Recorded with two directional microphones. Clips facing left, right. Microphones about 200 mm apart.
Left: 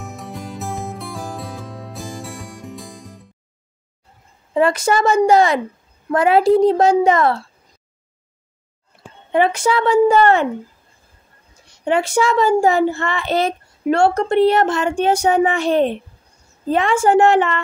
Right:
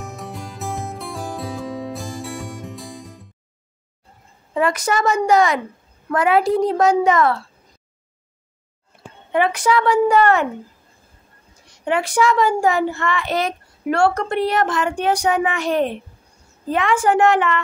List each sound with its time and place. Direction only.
0.0 s music: centre (ahead or behind)
4.6 s a child's voice: 30° left (ahead or behind)
9.3 s a child's voice: 25° left (ahead or behind)
11.8 s a child's voice: 25° left (ahead or behind)